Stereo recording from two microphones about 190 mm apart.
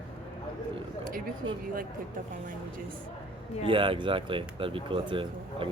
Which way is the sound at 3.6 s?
25° right (ahead or behind).